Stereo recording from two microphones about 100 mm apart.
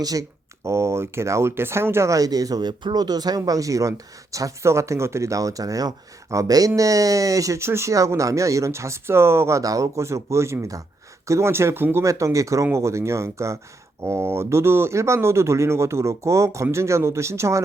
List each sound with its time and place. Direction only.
0.0 s speech: 35° right (ahead or behind)